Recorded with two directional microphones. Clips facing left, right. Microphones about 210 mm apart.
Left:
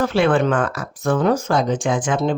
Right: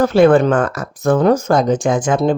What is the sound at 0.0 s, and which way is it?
Speech, 40° right (ahead or behind).